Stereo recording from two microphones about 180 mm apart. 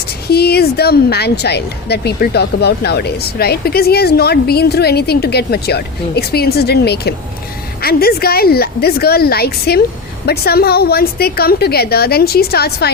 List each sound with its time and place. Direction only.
0.3 s a woman's voice: 60° left (ahead or behind)